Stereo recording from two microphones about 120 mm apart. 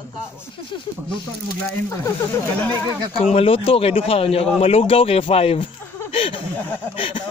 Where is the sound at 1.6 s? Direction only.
25° left (ahead or behind).